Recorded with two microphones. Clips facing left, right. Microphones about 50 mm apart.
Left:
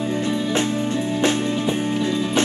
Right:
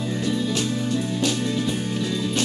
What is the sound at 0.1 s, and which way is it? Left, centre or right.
Music, left.